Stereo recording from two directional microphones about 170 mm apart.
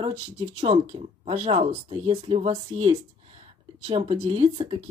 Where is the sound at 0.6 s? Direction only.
35° right (ahead or behind).